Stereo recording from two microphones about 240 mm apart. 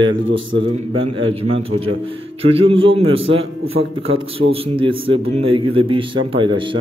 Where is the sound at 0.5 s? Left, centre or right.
Right.